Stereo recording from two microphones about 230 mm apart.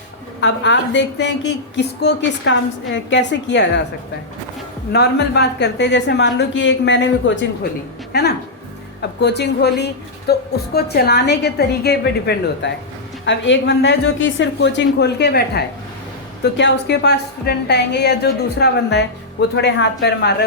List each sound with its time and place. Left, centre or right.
0.4 s a woman's voice: left
4.9 s a woman's voice: left